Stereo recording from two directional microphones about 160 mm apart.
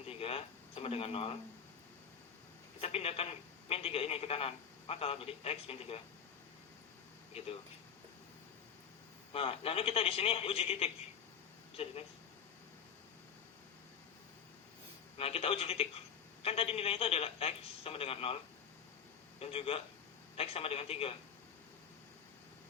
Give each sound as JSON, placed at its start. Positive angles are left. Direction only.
{"t": 0.1, "sound": "a sound", "side_deg": 35}
{"t": 2.8, "sound": "speech", "side_deg": 40}
{"t": 7.3, "sound": "speech", "side_deg": 40}
{"t": 9.3, "sound": "speech", "side_deg": 35}
{"t": 15.2, "sound": "speech", "side_deg": 35}
{"t": 19.4, "sound": "speech", "side_deg": 35}